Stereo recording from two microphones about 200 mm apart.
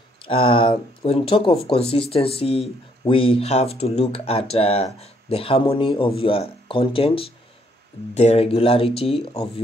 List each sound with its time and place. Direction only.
0.2 s speech: 25° left (ahead or behind)